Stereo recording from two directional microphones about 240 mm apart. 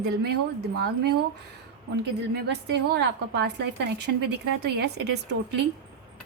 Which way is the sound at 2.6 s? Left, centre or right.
Right.